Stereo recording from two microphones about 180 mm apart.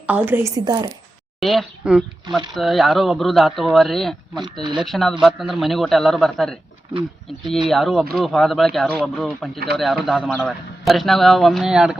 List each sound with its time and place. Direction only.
0.1 s a woman's voice: 10° right (ahead or behind)
0.5 s a woman's voice: 20° right (ahead or behind)
1.4 s a man's voice: centre (ahead or behind)
4.6 s a woman's voice: 25° right (ahead or behind)
4.9 s a man's voice: centre (ahead or behind)
7.7 s a man's voice: centre (ahead or behind)